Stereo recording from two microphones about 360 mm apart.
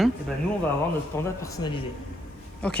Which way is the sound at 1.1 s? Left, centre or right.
Centre.